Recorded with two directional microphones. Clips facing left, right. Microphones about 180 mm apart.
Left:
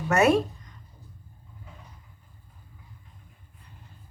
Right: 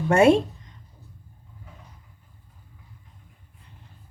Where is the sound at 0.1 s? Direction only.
30° right (ahead or behind).